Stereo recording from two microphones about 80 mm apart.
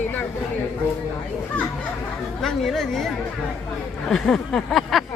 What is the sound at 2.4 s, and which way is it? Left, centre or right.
Speech, centre.